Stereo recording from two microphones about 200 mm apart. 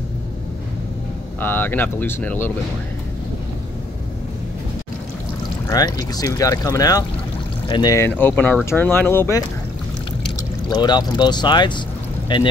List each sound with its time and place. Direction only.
1.4 s speech: 10° left (ahead or behind)
5.7 s speech: 20° left (ahead or behind)
10.7 s speech: 20° left (ahead or behind)